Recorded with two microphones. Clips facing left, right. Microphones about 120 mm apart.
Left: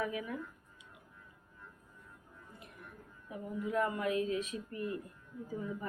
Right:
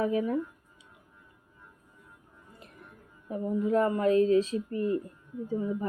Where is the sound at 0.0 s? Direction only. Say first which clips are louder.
Right 10 dB; 35° right (ahead or behind).